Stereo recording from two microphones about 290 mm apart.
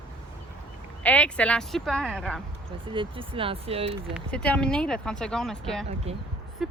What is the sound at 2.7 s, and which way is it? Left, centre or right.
Speech, centre.